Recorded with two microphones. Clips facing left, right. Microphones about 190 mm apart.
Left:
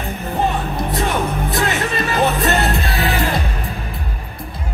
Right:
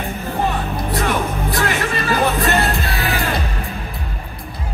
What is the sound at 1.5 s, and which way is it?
Music, 20° left (ahead or behind).